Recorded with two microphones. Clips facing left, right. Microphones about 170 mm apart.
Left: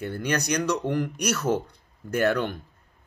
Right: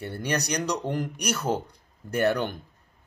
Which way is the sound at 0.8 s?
15° right (ahead or behind).